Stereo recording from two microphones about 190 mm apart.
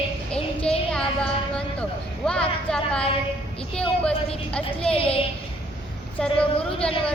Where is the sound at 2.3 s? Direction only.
5° left (ahead or behind).